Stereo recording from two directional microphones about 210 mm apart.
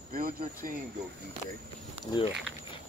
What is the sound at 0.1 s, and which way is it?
Speech, 40° right (ahead or behind).